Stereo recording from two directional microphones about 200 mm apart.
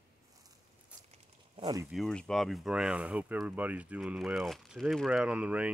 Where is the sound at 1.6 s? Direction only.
20° right (ahead or behind).